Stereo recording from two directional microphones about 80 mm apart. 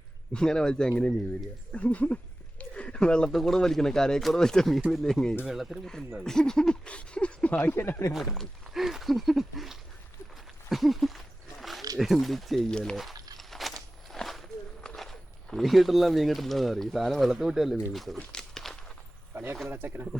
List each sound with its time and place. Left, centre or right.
0.3 s speech: centre
2.6 s a sound: centre
3.2 s speech: centre
5.5 s speech: centre
6.2 s speech: centre
7.6 s speech: left
8.1 s a sound: centre
11.9 s speech: centre
13.3 s walk: centre
19.3 s speech: right